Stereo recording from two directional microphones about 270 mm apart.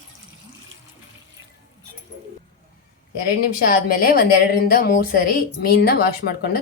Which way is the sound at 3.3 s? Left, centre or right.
Left.